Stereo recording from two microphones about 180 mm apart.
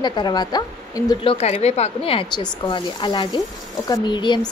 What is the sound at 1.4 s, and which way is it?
Speech, 35° left (ahead or behind).